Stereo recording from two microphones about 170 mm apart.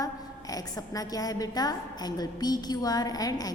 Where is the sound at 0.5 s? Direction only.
20° left (ahead or behind).